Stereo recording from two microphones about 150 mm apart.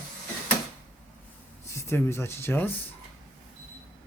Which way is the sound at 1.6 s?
20° left (ahead or behind).